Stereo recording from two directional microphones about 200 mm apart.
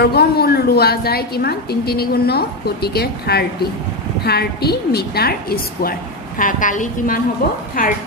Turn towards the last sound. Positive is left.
turn(degrees=45)  # may be behind; listen again after turning